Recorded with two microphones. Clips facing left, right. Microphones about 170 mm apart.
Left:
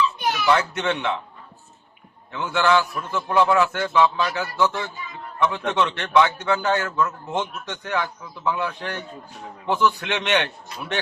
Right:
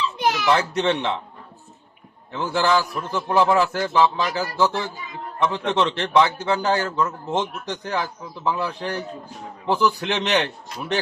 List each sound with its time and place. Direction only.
0.2 s a sound: 90° right
0.5 s a man's voice: 30° right (ahead or behind)
2.3 s a man's voice: 30° right (ahead or behind)